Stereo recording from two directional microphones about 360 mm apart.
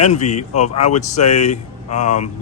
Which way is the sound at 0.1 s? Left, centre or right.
Centre.